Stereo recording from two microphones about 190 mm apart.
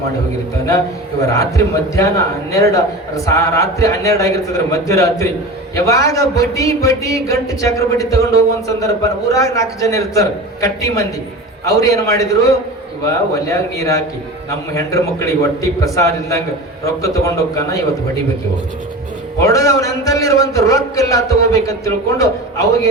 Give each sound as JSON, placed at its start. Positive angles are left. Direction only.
{"t": 1.2, "sound": "speech", "side_deg": 15}
{"t": 19.4, "sound": "speech", "side_deg": 15}